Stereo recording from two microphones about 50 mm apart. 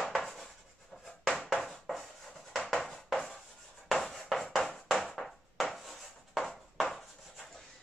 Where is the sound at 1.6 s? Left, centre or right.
Centre.